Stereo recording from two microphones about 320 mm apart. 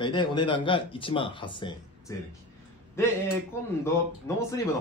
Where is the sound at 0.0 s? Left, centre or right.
Centre.